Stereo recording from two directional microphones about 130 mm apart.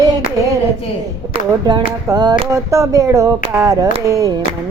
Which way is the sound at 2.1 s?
30° right (ahead or behind).